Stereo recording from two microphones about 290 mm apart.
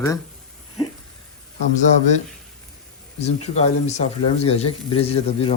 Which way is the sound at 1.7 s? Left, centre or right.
Left.